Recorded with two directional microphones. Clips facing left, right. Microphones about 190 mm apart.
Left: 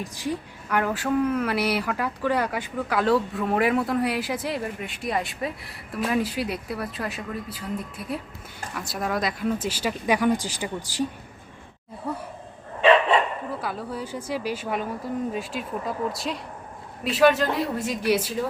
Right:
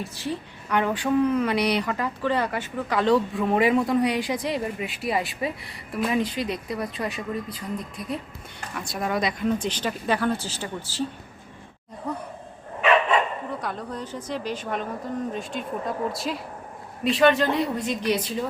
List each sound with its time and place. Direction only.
0.0 s a woman's voice: 15° left (ahead or behind)
12.8 s dog: 30° left (ahead or behind)
13.6 s a woman's voice: 5° left (ahead or behind)